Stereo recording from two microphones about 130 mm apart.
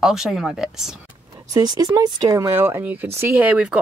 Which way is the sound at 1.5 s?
30° right (ahead or behind).